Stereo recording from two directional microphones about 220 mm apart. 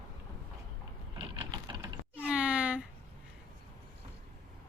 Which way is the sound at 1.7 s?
10° right (ahead or behind).